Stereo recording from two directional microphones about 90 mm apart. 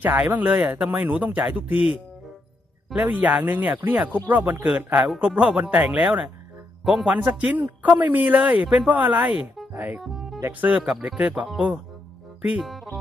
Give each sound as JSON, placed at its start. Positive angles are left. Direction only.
{"t": 0.0, "sound": "speech", "side_deg": -20}
{"t": 2.9, "sound": "speech", "side_deg": -20}
{"t": 10.0, "sound": "music", "side_deg": 0}
{"t": 10.6, "sound": "speech", "side_deg": -15}